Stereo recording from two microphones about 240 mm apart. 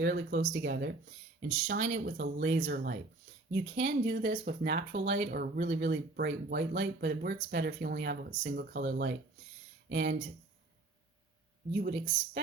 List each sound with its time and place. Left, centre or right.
0.0 s speech: right
11.8 s speech: right